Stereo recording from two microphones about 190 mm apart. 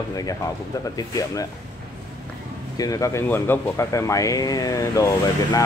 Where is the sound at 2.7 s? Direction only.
20° left (ahead or behind).